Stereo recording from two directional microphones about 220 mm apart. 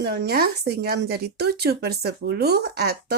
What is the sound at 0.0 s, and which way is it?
Speech, 45° right (ahead or behind).